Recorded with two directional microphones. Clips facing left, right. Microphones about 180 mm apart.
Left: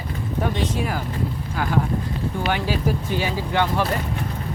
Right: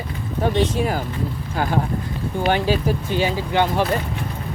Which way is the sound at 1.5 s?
35° right (ahead or behind).